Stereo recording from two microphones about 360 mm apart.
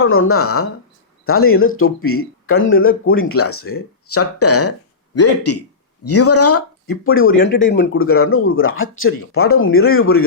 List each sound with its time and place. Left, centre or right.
0.0 s speech: left